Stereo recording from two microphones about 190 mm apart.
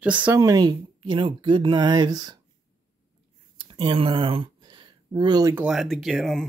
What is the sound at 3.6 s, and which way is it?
Speech, 25° right (ahead or behind).